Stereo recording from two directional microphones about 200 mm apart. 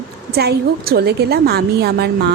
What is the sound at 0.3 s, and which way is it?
A woman's voice, 50° right (ahead or behind).